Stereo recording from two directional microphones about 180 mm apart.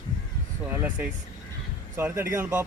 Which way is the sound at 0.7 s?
10° right (ahead or behind).